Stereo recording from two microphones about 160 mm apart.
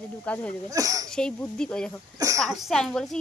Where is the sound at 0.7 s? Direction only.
20° right (ahead or behind).